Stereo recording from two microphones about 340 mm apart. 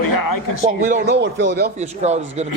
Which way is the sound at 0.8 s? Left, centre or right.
Right.